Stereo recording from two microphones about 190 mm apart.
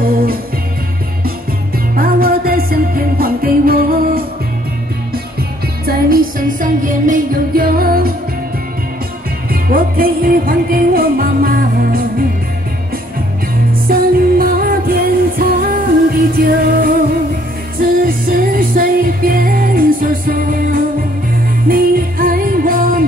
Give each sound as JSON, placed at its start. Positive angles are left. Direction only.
{"t": 0.0, "sound": "music", "side_deg": -50}
{"t": 2.0, "sound": "music", "side_deg": -50}
{"t": 5.9, "sound": "music", "side_deg": -50}
{"t": 9.5, "sound": "music", "side_deg": -50}
{"t": 13.8, "sound": "music", "side_deg": -50}